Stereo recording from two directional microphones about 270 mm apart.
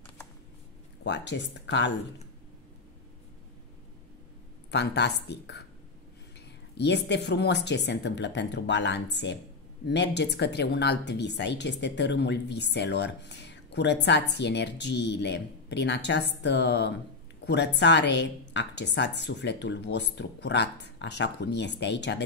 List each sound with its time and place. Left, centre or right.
1.0 s speech: left
4.6 s speech: left
6.8 s speech: left